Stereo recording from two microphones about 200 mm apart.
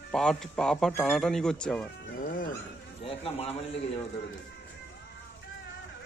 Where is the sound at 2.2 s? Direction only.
45° left (ahead or behind).